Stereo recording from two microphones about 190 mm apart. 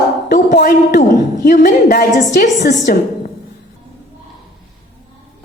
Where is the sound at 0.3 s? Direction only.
50° left (ahead or behind).